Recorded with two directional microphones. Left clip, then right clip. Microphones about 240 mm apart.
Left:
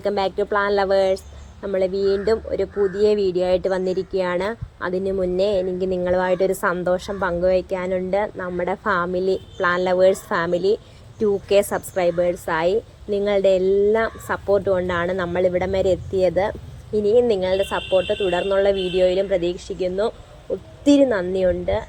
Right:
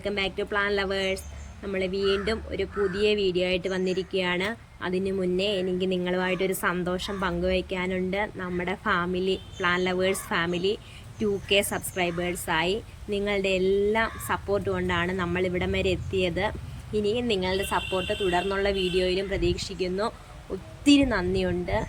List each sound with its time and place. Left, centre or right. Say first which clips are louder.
0.0 s speech: left 7 dB; centre
20.8 s speech: left 5 dB; centre